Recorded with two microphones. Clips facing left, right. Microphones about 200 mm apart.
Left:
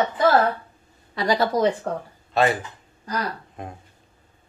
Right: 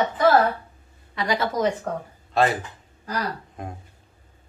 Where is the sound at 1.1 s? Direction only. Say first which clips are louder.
Left 3 dB; 35° left (ahead or behind).